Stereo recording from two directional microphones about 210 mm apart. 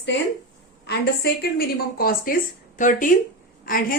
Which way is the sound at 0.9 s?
50° left (ahead or behind).